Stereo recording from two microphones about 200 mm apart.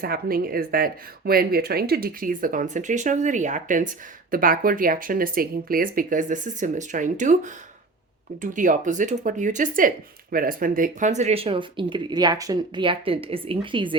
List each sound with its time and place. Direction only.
0.0 s speech: 45° right (ahead or behind); by 13.9 s 25° right (ahead or behind)